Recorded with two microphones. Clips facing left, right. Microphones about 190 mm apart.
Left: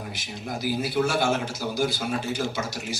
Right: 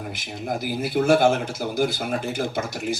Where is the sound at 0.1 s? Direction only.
50° right (ahead or behind).